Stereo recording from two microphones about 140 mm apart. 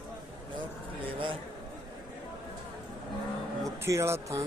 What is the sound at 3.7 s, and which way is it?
Speech, 20° right (ahead or behind).